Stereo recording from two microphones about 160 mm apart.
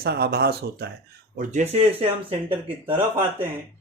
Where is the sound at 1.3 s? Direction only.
45° right (ahead or behind).